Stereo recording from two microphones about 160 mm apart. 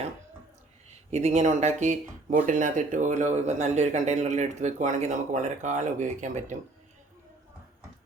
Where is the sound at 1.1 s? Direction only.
45° right (ahead or behind).